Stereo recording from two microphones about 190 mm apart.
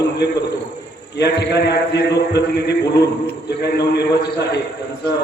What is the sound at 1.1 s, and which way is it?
A man's voice, 60° left (ahead or behind).